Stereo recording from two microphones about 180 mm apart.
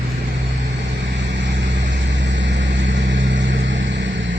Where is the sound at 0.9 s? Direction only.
80° right.